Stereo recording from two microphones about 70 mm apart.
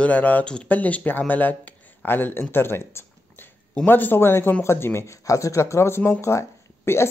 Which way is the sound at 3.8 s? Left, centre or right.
Left.